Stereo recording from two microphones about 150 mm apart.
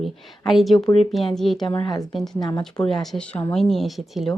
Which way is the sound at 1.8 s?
25° left (ahead or behind).